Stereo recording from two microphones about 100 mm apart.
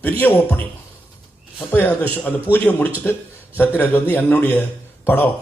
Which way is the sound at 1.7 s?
20° left (ahead or behind).